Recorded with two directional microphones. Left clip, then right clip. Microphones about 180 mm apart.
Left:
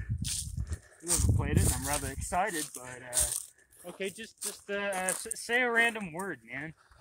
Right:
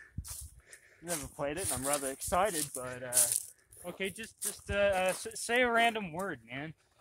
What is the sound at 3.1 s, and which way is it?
Rattle, 35° left (ahead or behind).